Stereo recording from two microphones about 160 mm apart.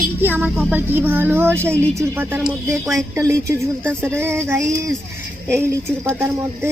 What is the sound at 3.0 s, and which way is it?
Speech, 20° right (ahead or behind).